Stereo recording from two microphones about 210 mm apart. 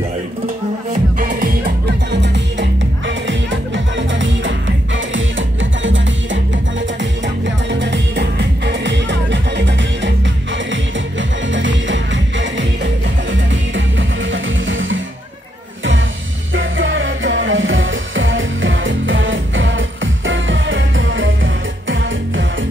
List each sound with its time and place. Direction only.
1.2 s music: 40° right (ahead or behind)
1.9 s music: 55° right (ahead or behind)
16.5 s music: 65° right (ahead or behind)